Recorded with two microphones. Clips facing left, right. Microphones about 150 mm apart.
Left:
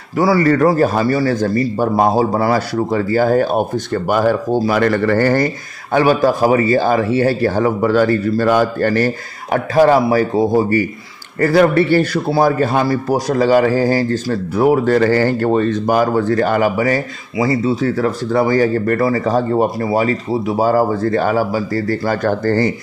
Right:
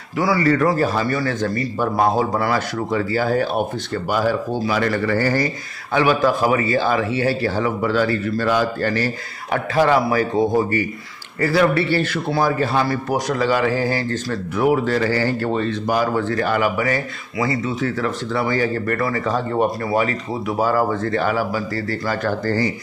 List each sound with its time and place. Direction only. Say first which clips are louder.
0.2 s a man's voice: left 5 dB; 40° left (ahead or behind)
5.9 s a man's voice: left 4 dB; 40° left (ahead or behind)
18.9 s speech: left 6 dB; 30° left (ahead or behind); by 22.7 s 50° left (ahead or behind)